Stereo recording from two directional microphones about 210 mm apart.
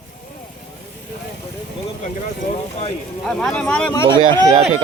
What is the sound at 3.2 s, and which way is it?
Speech, centre (ahead or behind).